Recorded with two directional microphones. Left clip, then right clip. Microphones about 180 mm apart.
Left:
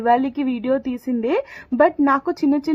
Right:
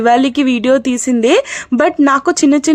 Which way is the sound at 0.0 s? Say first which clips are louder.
Right 7 dB; 25° right (ahead or behind).